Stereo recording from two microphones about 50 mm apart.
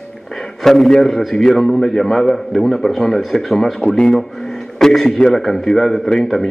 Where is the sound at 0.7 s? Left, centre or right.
Centre.